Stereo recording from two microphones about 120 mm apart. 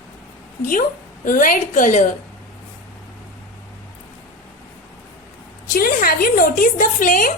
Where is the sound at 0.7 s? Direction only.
90° left.